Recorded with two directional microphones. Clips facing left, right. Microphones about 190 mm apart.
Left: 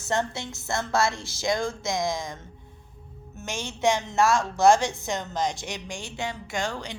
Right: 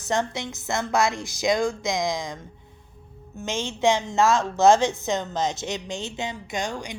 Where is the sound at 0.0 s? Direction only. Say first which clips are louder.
Right 2 dB; 15° right (ahead or behind).